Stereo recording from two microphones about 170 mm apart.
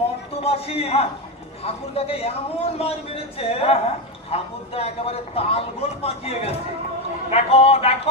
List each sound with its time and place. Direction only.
0.3 s a man's voice: 35° left (ahead or behind)